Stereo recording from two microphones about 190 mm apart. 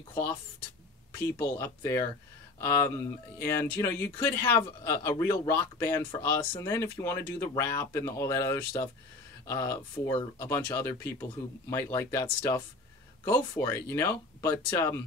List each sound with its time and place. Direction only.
0.1 s speech: 10° left (ahead or behind)